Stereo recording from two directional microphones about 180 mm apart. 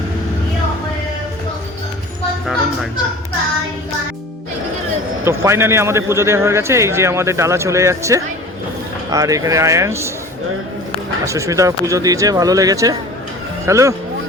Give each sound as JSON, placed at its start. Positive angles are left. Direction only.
{"t": 5.2, "sound": "a man's voice", "side_deg": -15}
{"t": 11.3, "sound": "a man's voice", "side_deg": -15}